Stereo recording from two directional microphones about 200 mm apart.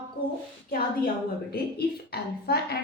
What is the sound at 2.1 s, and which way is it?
Speech, 50° left (ahead or behind).